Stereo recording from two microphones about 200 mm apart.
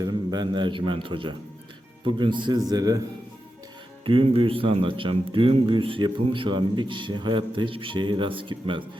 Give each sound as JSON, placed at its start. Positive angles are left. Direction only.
{"t": 0.0, "sound": "speech", "side_deg": -20}
{"t": 4.0, "sound": "speech", "side_deg": -25}